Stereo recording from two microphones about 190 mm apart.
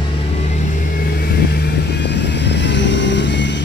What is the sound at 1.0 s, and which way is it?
Vehicle, 50° left (ahead or behind).